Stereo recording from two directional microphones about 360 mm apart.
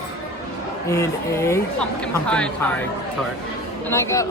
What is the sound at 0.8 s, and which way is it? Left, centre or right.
A woman's voice, centre.